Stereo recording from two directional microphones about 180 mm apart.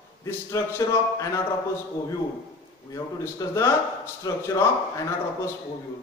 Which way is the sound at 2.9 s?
15° left (ahead or behind).